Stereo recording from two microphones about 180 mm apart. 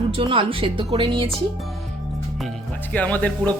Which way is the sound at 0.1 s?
30° right (ahead or behind).